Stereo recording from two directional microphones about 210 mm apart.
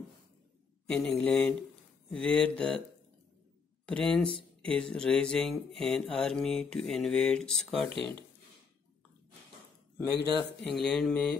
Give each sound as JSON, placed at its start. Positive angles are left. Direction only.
{"t": 0.8, "sound": "mantra", "side_deg": 5}
{"t": 3.8, "sound": "speech", "side_deg": 5}
{"t": 4.6, "sound": "mantra", "side_deg": 5}
{"t": 10.6, "sound": "mantra", "side_deg": 0}